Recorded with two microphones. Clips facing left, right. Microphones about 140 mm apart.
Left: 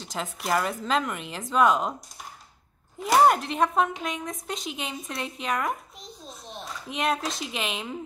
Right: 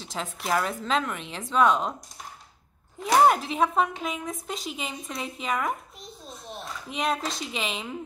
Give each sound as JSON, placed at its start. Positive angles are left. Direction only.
{"t": 0.0, "sound": "speech", "side_deg": 0}
{"t": 3.0, "sound": "speech", "side_deg": 0}